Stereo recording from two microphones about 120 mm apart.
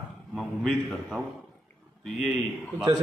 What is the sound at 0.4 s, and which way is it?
Speech, centre (ahead or behind).